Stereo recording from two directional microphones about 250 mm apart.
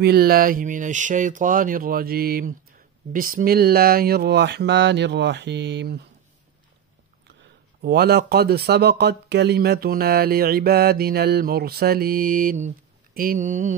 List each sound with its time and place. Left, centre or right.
0.0 s speech: right
7.8 s speech: right